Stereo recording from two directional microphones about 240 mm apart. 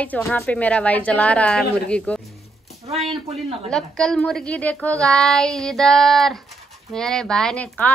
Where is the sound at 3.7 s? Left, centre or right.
Centre.